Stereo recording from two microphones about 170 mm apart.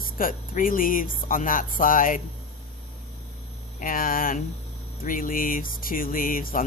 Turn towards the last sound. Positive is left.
turn(degrees=55)  # may be behind; listen again after turning